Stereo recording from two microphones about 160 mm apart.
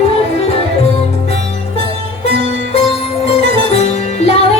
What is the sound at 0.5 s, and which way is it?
Music, 40° left (ahead or behind).